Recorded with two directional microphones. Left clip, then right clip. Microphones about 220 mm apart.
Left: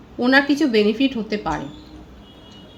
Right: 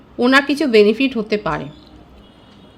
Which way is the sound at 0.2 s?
50° right (ahead or behind).